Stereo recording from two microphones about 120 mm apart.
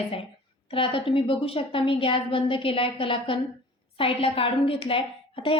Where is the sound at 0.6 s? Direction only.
50° left (ahead or behind).